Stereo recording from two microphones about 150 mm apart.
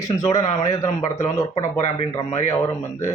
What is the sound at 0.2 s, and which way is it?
Speech, 20° left (ahead or behind).